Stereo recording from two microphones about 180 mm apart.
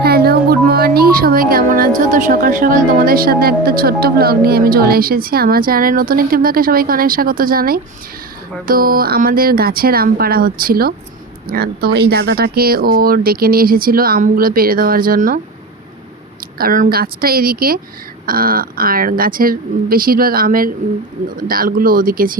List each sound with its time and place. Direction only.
0.0 s music: 60° right (ahead or behind)
2.0 s a woman's voice: 45° right (ahead or behind)
16.6 s a woman's voice: 50° right (ahead or behind)